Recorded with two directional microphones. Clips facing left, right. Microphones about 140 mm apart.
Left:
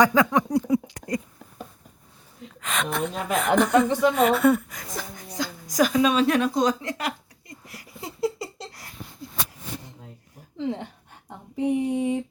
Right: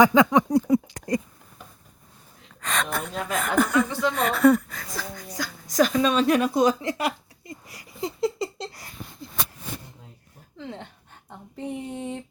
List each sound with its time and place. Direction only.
0.1 s a sound: 20° right (ahead or behind)
0.5 s speech: 40° right (ahead or behind)
2.6 s a woman's voice: 5° left (ahead or behind)
3.7 s a woman's voice: 20° left (ahead or behind)
4.0 s speech: 10° left (ahead or behind)
4.8 s speech: 20° left (ahead or behind)
5.7 s a woman's voice: 10° left (ahead or behind); by 7.1 s 10° right (ahead or behind)
7.7 s a sound: 5° left (ahead or behind)
10.6 s speech: 15° left (ahead or behind)
11.3 s a sound: 15° left (ahead or behind)